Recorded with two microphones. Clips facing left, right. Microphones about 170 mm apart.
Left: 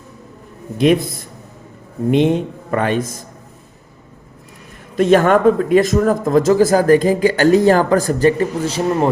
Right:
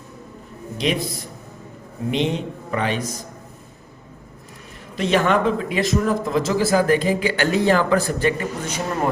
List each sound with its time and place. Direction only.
0.8 s speech: 50° left (ahead or behind)
4.9 s speech: 45° left (ahead or behind)